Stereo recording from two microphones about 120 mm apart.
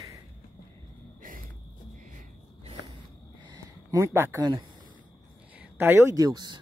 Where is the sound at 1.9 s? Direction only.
90° right.